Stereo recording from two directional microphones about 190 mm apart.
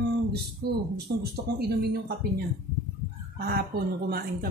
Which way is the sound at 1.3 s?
55° right (ahead or behind).